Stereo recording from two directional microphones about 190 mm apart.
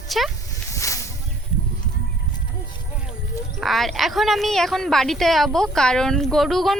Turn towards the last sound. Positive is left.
turn(degrees=0)  # may be behind; listen again after turning